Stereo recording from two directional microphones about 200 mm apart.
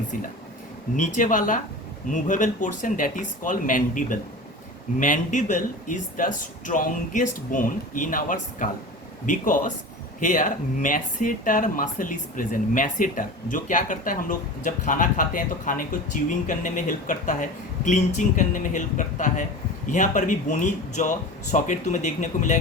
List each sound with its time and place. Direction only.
1.1 s speech: 40° left (ahead or behind)